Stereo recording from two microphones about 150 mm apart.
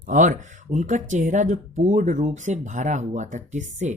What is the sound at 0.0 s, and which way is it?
Speech, 60° right (ahead or behind).